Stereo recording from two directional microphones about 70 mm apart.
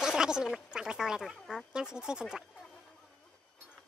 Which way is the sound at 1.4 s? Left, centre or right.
Centre.